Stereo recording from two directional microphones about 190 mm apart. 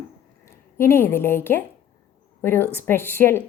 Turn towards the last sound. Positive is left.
turn(degrees=10)  # may be behind; listen again after turning